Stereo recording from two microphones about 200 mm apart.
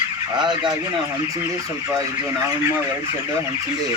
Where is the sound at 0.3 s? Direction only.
20° right (ahead or behind).